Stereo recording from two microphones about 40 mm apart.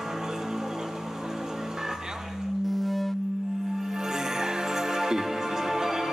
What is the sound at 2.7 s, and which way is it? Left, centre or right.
Music, centre.